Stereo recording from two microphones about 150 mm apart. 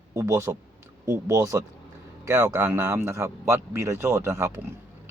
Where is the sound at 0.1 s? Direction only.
20° right (ahead or behind).